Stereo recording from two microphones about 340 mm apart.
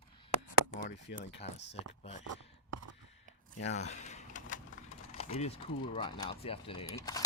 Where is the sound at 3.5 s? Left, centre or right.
Centre.